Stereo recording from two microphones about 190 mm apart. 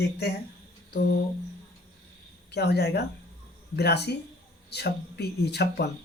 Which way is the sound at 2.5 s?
60° left (ahead or behind).